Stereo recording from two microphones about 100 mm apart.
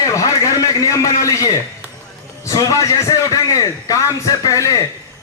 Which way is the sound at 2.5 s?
40° left (ahead or behind).